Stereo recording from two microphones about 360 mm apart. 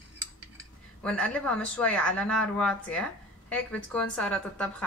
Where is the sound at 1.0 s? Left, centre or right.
Centre.